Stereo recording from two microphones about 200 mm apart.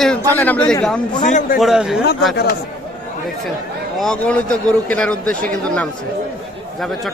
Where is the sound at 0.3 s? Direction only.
10° left (ahead or behind).